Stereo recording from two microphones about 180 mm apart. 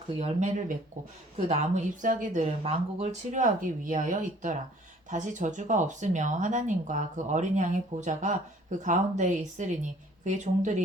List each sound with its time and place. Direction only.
0.2 s speech: 40° right (ahead or behind)